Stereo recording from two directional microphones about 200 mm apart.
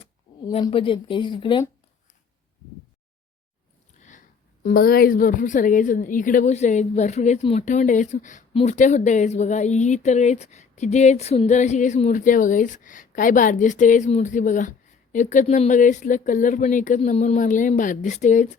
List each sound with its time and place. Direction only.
0.6 s speech: 25° left (ahead or behind)
4.6 s a woman's voice: 50° left (ahead or behind)